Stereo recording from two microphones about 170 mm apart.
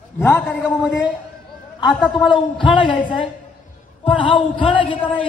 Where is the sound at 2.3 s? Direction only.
30° left (ahead or behind).